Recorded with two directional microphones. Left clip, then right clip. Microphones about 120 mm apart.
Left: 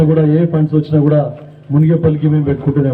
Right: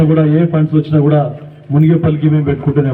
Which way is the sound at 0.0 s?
25° left (ahead or behind).